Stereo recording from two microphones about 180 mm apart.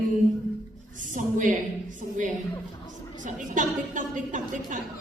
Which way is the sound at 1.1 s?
45° right (ahead or behind).